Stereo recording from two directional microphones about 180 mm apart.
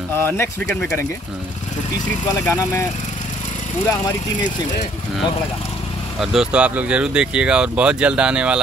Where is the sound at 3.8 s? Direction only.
20° left (ahead or behind).